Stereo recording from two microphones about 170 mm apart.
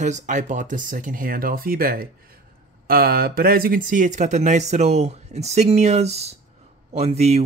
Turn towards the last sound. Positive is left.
turn(degrees=-40)  # may be behind; listen again after turning